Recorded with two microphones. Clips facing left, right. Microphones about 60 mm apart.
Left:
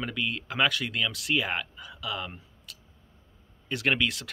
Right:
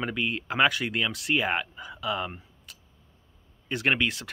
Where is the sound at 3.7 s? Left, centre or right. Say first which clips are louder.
Right 1 dB; centre.